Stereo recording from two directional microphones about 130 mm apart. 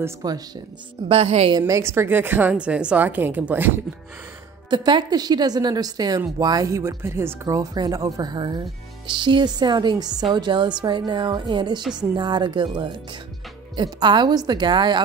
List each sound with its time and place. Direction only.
0.0 s a woman's voice: 30° right (ahead or behind)
1.0 s a woman's voice: 50° right (ahead or behind)
1.6 s a woman's voice: 20° right (ahead or behind)
4.6 s a woman's voice: 35° right (ahead or behind)